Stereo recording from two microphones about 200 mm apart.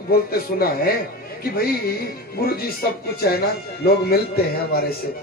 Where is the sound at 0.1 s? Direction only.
50° left (ahead or behind).